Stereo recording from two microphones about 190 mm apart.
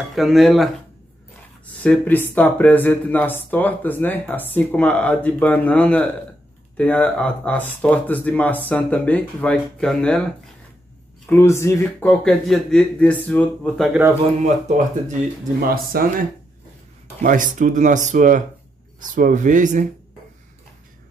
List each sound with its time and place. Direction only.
0.1 s speech: centre (ahead or behind)
1.8 s speech: 10° left (ahead or behind)
11.2 s speech: 15° left (ahead or behind)
14.4 s speech: 40° right (ahead or behind)
15.7 s speech: 50° right (ahead or behind)
17.2 s speech: 45° right (ahead or behind)